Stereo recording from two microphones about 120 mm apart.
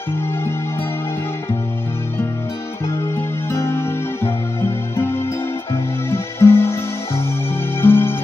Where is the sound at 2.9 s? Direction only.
20° left (ahead or behind).